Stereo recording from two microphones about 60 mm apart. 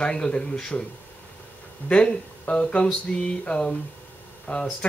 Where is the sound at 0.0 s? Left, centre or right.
Centre.